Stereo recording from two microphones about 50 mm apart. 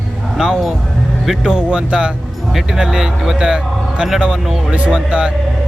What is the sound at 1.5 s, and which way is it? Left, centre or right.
A man's voice, centre.